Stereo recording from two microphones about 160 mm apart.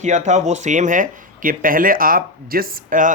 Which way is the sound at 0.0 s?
50° right (ahead or behind).